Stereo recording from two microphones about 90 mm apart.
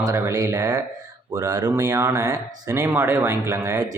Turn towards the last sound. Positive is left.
turn(degrees=-35)  # may be behind; listen again after turning